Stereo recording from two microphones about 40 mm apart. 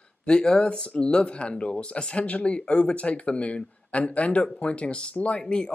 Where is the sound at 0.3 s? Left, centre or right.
Left.